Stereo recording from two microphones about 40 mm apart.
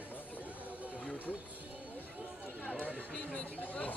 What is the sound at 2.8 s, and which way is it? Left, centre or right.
Chatter, right.